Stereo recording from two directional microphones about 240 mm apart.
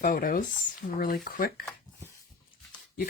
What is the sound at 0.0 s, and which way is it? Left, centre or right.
Speech, left.